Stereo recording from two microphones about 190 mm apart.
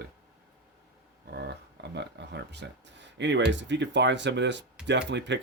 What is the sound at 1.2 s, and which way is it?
Speech, 60° right (ahead or behind).